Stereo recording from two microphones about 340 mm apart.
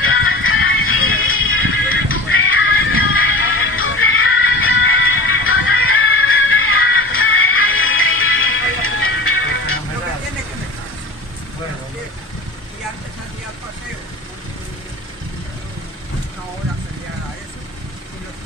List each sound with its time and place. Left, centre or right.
0.0 s music: left